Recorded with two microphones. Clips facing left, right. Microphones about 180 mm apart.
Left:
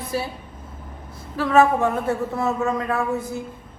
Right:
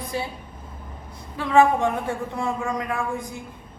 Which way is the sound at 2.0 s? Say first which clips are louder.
Left 4 dB; 15° right (ahead or behind).